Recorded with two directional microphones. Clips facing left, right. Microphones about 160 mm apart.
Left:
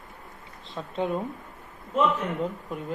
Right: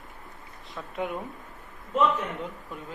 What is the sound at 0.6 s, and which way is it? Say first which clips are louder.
Speech: left 3 dB; 25° left (ahead or behind).